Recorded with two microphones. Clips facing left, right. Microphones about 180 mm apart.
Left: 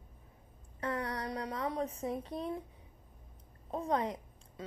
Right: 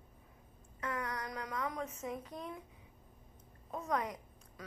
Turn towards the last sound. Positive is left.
turn(degrees=30)  # may be behind; listen again after turning